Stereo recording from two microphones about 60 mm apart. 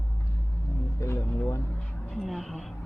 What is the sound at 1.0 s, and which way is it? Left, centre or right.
Speech, left.